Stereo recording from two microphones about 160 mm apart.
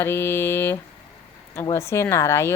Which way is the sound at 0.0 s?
15° left (ahead or behind).